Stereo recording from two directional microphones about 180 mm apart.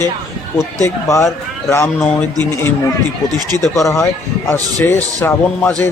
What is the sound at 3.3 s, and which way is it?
Speech, 20° right (ahead or behind).